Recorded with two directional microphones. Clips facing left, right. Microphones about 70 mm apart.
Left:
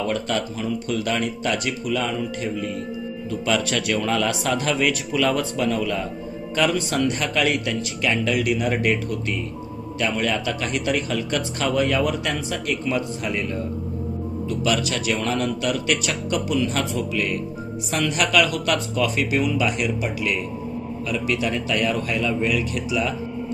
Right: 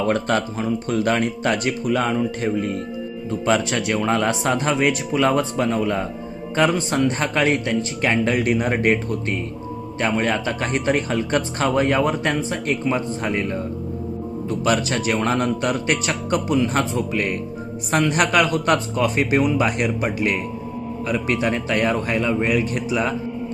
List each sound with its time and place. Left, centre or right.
0.0 s a man's voice: right
3.4 s a man's voice: right
14.6 s a man's voice: right